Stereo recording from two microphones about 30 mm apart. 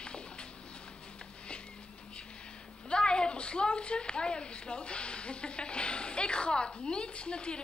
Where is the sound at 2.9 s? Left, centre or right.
Left.